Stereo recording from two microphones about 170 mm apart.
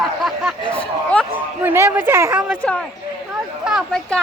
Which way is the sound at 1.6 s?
15° right (ahead or behind).